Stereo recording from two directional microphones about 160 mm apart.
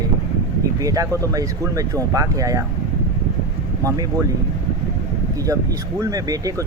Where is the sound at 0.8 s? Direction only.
20° right (ahead or behind).